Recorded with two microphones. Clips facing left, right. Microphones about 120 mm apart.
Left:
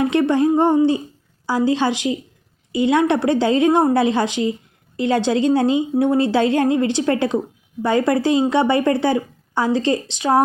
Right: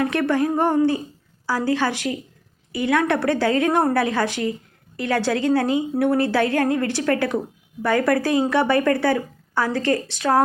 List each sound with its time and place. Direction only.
0.0 s a woman's voice: 20° left (ahead or behind)